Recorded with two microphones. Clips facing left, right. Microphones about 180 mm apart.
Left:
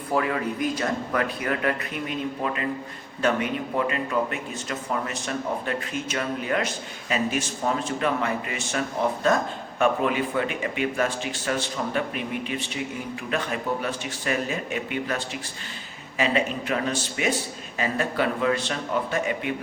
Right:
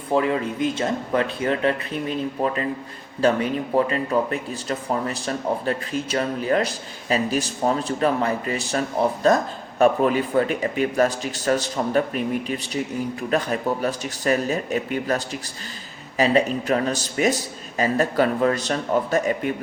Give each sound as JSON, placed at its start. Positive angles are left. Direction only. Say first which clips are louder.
{"t": 0.1, "sound": "speech", "louder": "right 4 dB", "side_deg": -25}